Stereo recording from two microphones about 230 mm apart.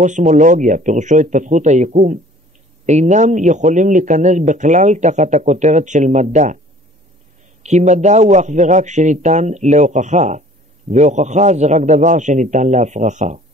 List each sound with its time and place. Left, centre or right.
0.0 s a man's voice: right
7.6 s a man's voice: right